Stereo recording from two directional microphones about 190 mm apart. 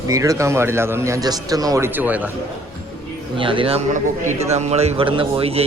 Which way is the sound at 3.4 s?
25° right (ahead or behind).